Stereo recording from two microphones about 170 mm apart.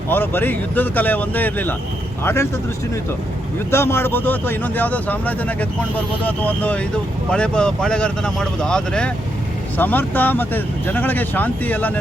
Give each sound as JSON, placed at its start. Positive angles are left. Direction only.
{"t": 0.1, "sound": "speech", "side_deg": 10}
{"t": 3.7, "sound": "speech", "side_deg": 15}